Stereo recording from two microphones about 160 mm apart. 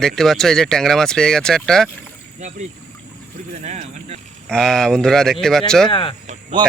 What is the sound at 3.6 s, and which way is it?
Vehicle, 45° right (ahead or behind).